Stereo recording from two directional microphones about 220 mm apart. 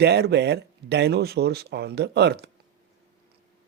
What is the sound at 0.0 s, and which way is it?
Speech, 50° right (ahead or behind).